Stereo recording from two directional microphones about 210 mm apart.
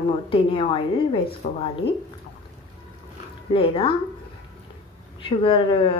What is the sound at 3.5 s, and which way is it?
Speech, 25° left (ahead or behind).